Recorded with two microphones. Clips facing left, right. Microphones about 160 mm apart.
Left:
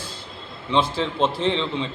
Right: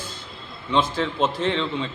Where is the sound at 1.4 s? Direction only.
Centre (ahead or behind).